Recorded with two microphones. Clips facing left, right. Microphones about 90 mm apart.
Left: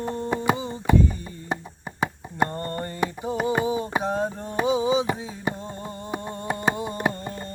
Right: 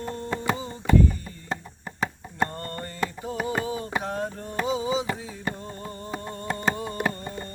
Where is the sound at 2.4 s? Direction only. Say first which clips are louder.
Left 5 dB; 20° left (ahead or behind).